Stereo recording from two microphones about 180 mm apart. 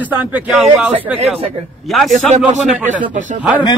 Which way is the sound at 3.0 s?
45° right (ahead or behind).